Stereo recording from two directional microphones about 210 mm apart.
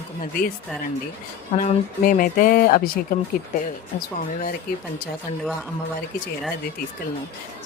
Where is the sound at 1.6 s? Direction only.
40° left (ahead or behind).